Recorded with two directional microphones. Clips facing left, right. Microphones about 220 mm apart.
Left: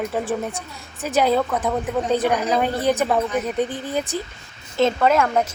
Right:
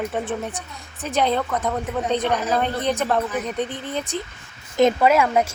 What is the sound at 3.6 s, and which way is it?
Speech, 35° left (ahead or behind).